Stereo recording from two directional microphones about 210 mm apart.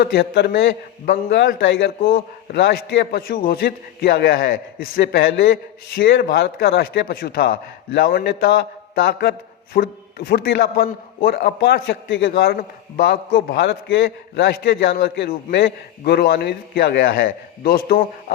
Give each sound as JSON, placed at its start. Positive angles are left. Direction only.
{"t": 0.0, "sound": "a man's voice", "side_deg": 50}